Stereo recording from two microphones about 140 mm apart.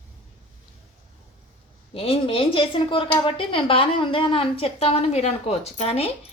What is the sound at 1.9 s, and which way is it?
A woman's voice, 45° left (ahead or behind).